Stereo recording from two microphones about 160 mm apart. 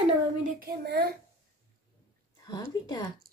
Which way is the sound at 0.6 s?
80° right.